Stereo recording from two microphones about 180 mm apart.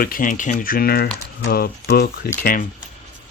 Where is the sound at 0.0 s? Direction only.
50° left (ahead or behind).